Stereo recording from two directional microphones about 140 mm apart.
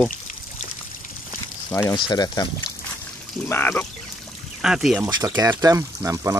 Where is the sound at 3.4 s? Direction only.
15° left (ahead or behind).